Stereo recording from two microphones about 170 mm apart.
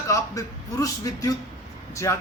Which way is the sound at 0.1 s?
20° left (ahead or behind).